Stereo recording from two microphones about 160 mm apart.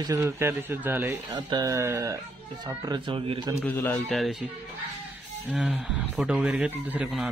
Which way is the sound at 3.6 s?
20° left (ahead or behind).